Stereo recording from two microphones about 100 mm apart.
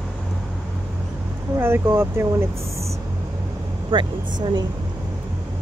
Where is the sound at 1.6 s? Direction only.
25° right (ahead or behind).